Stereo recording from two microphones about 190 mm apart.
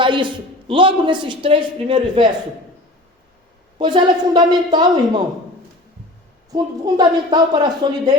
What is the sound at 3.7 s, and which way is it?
A woman's voice, 25° right (ahead or behind).